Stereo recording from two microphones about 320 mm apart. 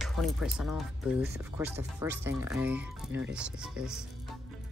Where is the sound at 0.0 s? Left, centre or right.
Centre.